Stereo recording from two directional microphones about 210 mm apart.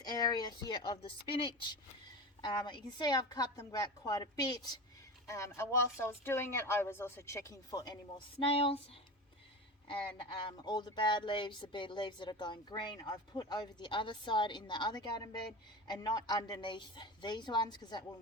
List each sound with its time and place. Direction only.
0.0 s speech: 20° left (ahead or behind)
9.9 s speech: 20° left (ahead or behind)